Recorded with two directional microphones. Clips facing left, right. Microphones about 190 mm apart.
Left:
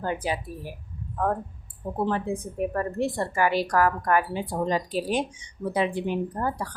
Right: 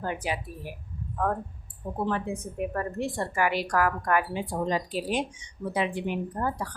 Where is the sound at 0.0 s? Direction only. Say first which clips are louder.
Left 3 dB; 30° left (ahead or behind).